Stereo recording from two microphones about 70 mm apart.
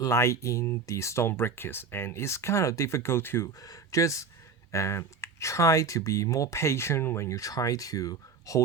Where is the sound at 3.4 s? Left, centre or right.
Left.